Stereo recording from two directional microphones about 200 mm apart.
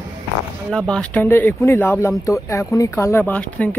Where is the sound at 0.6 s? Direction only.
5° left (ahead or behind).